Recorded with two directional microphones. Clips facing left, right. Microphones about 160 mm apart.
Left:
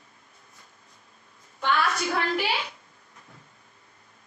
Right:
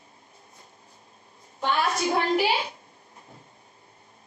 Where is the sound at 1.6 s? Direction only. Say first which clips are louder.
Even; 30° right (ahead or behind).